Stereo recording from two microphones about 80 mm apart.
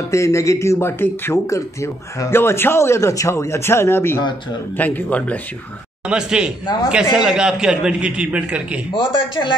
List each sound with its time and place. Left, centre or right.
0.1 s speech: left
1.3 s speech: left
4.2 s speech: left
4.7 s speech: left
6.0 s a man's voice: centre
6.6 s a man's voice: left
6.9 s a man's voice: centre
8.9 s speech: left